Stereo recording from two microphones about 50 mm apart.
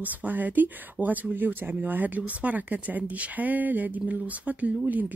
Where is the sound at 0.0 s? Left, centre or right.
Right.